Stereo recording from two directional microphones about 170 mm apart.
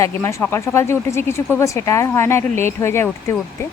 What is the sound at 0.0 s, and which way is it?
A woman's voice, 15° left (ahead or behind).